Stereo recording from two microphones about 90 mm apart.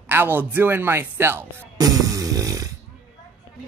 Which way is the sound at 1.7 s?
40° right (ahead or behind).